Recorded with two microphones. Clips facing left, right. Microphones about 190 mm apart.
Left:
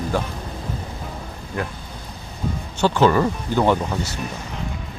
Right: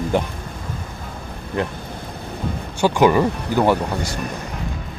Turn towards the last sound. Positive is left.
turn(degrees=-10)  # may be behind; listen again after turning